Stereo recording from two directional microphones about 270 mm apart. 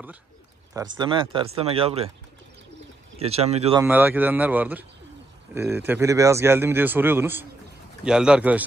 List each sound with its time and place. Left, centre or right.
0.9 s speech: centre
3.2 s speech: right
3.8 s a man's voice: centre